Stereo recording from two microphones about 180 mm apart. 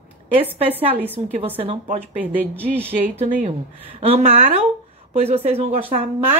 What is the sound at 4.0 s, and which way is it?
A woman's voice, 35° right (ahead or behind).